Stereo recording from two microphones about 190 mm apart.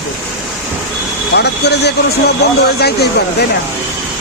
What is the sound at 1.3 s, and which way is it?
Speech, 60° left (ahead or behind).